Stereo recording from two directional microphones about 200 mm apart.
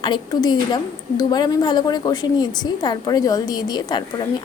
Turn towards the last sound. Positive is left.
turn(degrees=20)  # may be behind; listen again after turning